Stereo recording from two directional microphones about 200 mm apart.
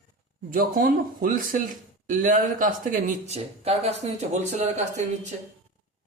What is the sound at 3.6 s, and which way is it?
Speech, 30° right (ahead or behind).